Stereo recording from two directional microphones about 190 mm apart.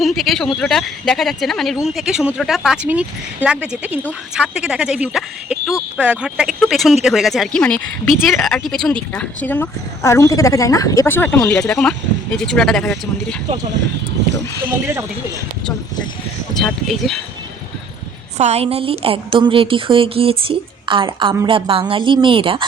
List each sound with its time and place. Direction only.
0.0 s speech: centre (ahead or behind)
16.6 s speech: centre (ahead or behind)
18.3 s a woman's voice: 35° right (ahead or behind)